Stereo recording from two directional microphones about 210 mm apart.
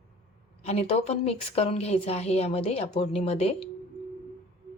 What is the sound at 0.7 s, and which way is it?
A woman's voice, 30° left (ahead or behind).